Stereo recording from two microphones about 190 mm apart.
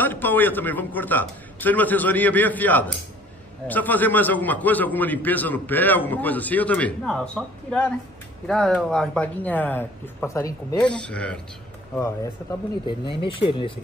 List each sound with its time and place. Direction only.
0.0 s a man's voice: 10° left (ahead or behind)
11.0 s a man's voice: 5° left (ahead or behind)
12.8 s speech: 25° left (ahead or behind)